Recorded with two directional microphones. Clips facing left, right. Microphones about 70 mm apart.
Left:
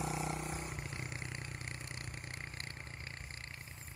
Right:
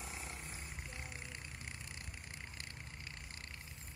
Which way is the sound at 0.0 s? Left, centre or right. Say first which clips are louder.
Left 10 dB; left.